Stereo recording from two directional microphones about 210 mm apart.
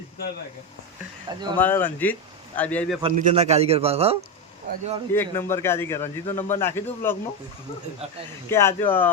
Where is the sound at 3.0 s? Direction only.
35° right (ahead or behind).